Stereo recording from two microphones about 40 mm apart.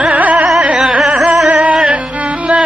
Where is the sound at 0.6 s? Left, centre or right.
Right.